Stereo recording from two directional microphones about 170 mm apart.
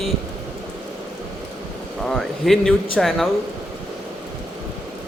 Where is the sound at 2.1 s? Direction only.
Centre (ahead or behind).